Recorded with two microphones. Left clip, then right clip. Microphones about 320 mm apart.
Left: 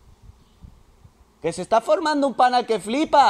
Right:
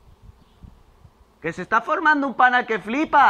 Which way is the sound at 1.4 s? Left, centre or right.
Centre.